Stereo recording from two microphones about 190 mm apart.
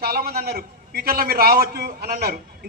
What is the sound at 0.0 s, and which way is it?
A man's voice, 55° right (ahead or behind).